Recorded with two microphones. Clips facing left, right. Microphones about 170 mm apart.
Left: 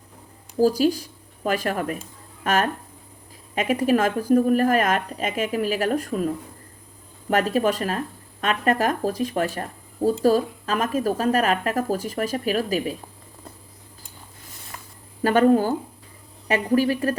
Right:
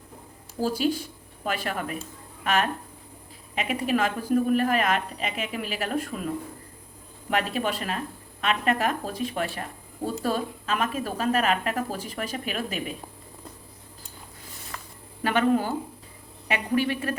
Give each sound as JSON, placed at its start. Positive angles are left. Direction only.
{"t": 0.6, "sound": "speech", "side_deg": 40}
{"t": 15.2, "sound": "speech", "side_deg": 40}